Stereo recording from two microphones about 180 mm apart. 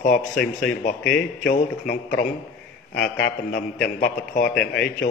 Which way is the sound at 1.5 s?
60° left (ahead or behind).